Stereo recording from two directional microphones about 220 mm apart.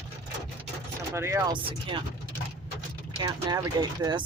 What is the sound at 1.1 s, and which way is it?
Speech, 10° right (ahead or behind).